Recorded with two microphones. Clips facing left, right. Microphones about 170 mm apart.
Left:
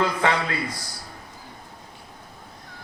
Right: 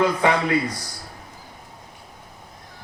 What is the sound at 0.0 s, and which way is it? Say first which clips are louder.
Speech: right 3 dB; 15° right (ahead or behind).